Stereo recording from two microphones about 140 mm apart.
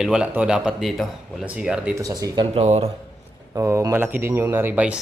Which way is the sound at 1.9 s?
25° right (ahead or behind).